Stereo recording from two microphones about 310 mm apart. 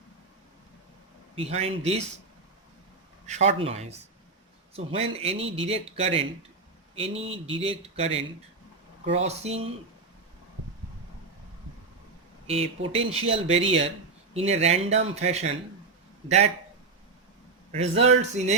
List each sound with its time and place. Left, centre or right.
1.4 s speech: centre
3.2 s speech: right
4.9 s speech: centre
12.5 s speech: centre
17.7 s speech: centre